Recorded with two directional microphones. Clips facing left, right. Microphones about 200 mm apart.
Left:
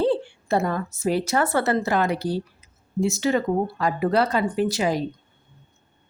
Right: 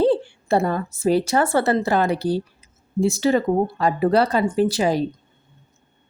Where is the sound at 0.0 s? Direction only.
35° right (ahead or behind).